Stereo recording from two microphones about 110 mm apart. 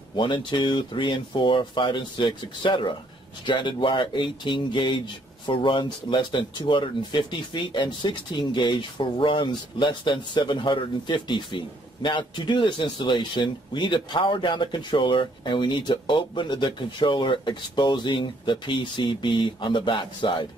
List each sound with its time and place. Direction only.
0.1 s speech: 45° left (ahead or behind)